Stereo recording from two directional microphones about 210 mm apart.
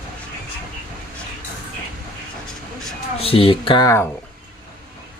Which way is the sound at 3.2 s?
25° left (ahead or behind).